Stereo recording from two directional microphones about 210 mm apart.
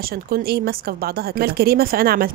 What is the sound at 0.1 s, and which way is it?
Speech, 45° right (ahead or behind).